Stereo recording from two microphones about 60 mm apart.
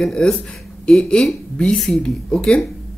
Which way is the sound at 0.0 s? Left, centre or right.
Centre.